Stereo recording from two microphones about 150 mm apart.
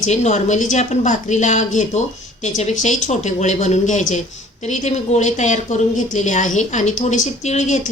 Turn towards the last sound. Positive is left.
turn(degrees=50)  # may be behind; listen again after turning